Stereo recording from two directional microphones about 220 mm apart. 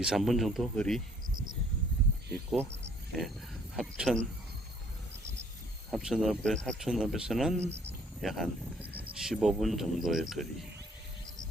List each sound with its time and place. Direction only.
0.0 s speech: centre (ahead or behind)
3.1 s a sound: centre (ahead or behind)
3.8 s speech: centre (ahead or behind)
5.9 s speech: centre (ahead or behind)
7.6 s speech: 30° right (ahead or behind)
8.2 s speech: centre (ahead or behind)